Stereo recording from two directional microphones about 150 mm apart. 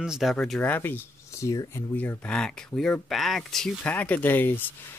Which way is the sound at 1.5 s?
25° left (ahead or behind).